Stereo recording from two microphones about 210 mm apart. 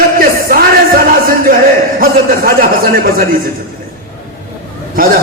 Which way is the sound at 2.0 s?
45° right (ahead or behind).